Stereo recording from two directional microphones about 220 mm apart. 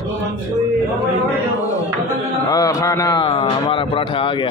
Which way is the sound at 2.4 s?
15° left (ahead or behind).